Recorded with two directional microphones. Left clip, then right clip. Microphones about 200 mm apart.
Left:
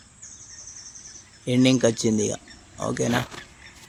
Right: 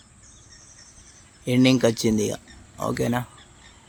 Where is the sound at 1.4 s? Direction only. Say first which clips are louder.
Right 1 dB; 10° right (ahead or behind).